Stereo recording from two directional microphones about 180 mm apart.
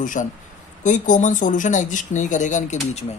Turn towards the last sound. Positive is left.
turn(degrees=35)  # may be behind; listen again after turning